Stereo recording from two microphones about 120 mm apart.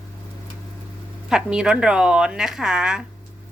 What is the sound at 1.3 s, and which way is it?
A woman's voice, 5° right (ahead or behind).